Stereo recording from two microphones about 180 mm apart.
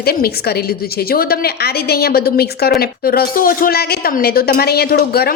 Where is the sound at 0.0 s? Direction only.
60° left (ahead or behind).